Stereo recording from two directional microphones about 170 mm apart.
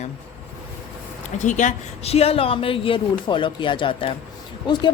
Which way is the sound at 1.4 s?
45° left (ahead or behind).